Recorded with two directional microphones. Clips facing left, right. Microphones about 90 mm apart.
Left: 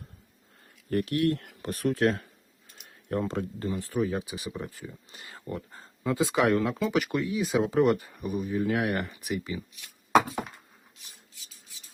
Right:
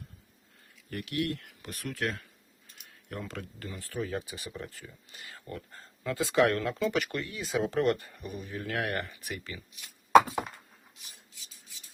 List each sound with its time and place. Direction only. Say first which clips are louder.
0.9 s speech: left 7 dB; 40° left (ahead or behind); by 9.6 s 15° left (ahead or behind)